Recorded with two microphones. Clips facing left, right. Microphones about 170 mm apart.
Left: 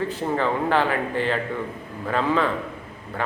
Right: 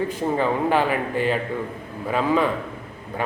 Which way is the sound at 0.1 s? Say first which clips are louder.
Right 2 dB; 10° right (ahead or behind).